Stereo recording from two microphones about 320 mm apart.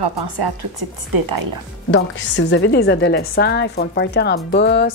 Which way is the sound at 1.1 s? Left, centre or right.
Right.